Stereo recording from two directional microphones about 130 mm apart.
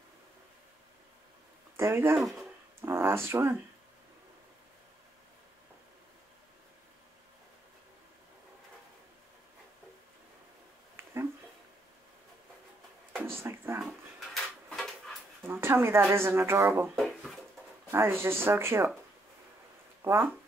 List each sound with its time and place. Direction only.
1.8 s speech: 20° right (ahead or behind)
2.1 s speech: centre (ahead or behind)
2.8 s speech: 20° right (ahead or behind)
13.2 s a sound: 20° right (ahead or behind)
13.8 s dog: centre (ahead or behind)
15.4 s a sound: 20° right (ahead or behind)
16.1 s speech: 20° right (ahead or behind)
16.9 s a sound: centre (ahead or behind)
17.9 s speech: 20° right (ahead or behind)
20.0 s speech: 25° right (ahead or behind)